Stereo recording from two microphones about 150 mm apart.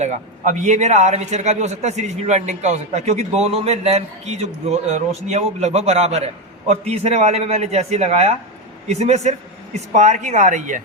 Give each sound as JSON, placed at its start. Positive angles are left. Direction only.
{"t": 0.0, "sound": "a man's voice", "side_deg": -50}